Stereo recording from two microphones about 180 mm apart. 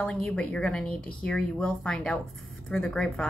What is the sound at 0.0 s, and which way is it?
Speech, 5° left (ahead or behind).